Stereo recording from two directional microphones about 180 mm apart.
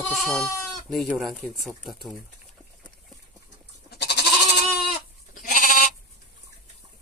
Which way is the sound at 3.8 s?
65° left (ahead or behind).